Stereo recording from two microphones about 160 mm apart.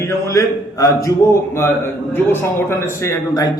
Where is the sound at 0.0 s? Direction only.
20° left (ahead or behind).